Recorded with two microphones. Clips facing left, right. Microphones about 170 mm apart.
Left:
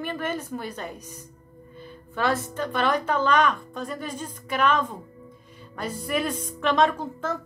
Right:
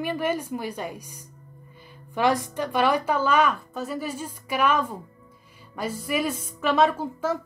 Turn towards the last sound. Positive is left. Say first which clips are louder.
# right 3 dB
turn(degrees=-10)  # may be behind; listen again after turning